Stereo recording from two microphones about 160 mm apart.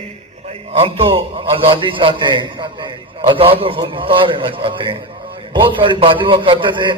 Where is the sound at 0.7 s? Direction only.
35° right (ahead or behind).